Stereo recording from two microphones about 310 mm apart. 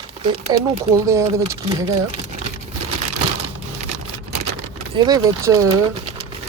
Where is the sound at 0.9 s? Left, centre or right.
Centre.